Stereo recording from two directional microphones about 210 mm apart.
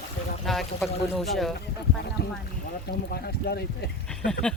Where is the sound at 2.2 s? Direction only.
50° left (ahead or behind).